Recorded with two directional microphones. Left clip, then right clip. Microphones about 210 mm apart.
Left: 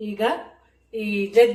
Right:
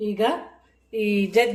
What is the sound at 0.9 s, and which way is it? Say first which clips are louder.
Speech: right 3 dB; 50° right (ahead or behind).